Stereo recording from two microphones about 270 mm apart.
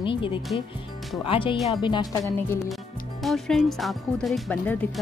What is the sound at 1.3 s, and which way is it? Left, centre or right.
Speech, centre.